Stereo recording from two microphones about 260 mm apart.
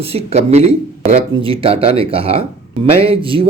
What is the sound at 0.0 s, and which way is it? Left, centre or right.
Speech, right.